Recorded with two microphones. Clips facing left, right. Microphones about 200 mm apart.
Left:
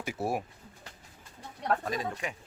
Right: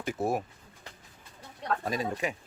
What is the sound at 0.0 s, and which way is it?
Speech, 10° left (ahead or behind).